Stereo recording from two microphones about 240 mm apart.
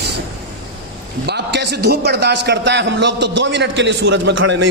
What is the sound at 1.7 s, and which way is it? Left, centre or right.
A man's voice, right.